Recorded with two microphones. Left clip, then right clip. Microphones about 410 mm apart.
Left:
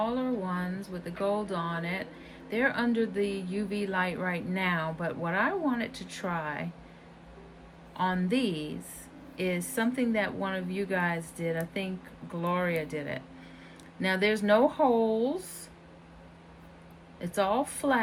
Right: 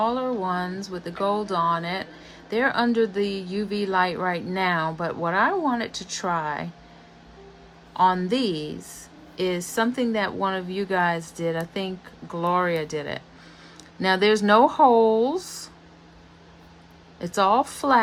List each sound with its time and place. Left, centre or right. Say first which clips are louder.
0.0 s speech: right 7 dB; centre
7.9 s speech: right 9 dB; centre
9.7 s speech: right 5 dB; centre
15.0 s speech: right 8 dB; right
17.2 s speech: right 8 dB; centre